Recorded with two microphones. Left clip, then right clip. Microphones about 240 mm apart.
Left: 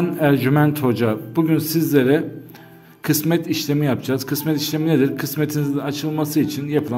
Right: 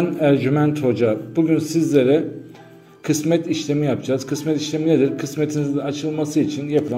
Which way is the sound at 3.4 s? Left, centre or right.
Left.